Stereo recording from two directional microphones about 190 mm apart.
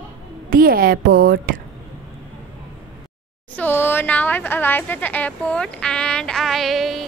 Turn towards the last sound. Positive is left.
turn(degrees=0)  # may be behind; listen again after turning